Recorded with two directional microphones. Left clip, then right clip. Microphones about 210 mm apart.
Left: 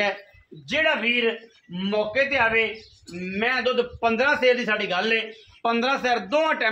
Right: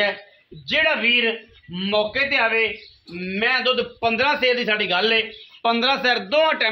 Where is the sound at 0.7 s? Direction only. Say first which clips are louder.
Right 3 dB; 35° right (ahead or behind).